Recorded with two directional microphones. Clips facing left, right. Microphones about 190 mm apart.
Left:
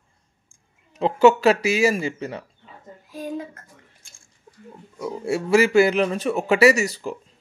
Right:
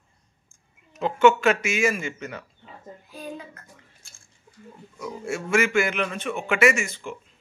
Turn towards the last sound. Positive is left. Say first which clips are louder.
# left 5 dB
turn(degrees=40)  # may be behind; listen again after turning